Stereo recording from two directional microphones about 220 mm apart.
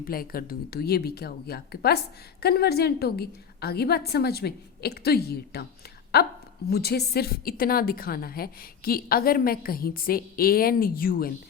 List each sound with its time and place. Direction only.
0.0 s a woman's voice: 40° left (ahead or behind)